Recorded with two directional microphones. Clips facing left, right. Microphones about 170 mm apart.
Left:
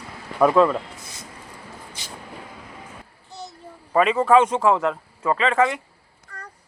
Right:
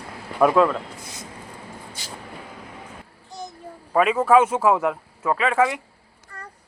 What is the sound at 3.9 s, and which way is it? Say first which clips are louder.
A man's voice: even; 5° right (ahead or behind).